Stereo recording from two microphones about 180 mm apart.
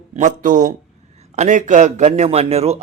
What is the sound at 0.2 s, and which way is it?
A man's voice, 45° right (ahead or behind).